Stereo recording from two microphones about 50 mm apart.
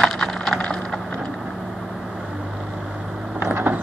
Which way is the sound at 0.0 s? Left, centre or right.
Centre.